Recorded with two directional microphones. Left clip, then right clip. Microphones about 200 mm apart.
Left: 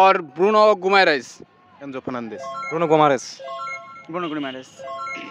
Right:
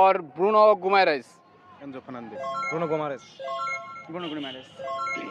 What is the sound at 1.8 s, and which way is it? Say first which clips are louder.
Speech: left 9 dB; 55° left (ahead or behind).